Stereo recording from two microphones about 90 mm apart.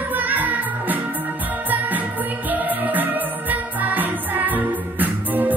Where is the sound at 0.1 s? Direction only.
20° right (ahead or behind).